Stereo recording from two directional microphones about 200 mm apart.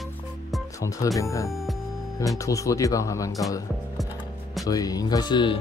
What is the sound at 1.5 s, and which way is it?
Music, centre (ahead or behind).